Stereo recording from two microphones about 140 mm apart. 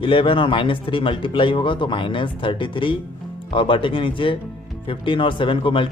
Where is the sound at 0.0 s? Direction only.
40° left (ahead or behind).